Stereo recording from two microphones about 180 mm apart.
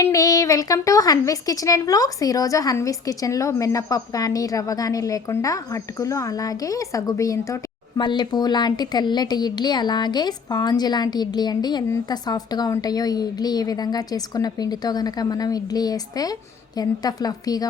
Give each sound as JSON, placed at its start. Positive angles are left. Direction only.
{"t": 0.0, "sound": "a woman's voice", "side_deg": 20}